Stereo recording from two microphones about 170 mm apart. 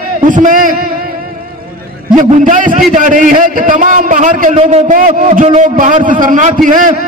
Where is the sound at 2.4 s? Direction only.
50° right (ahead or behind).